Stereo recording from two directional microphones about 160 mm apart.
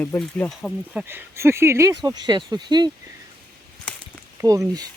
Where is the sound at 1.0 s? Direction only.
15° right (ahead or behind).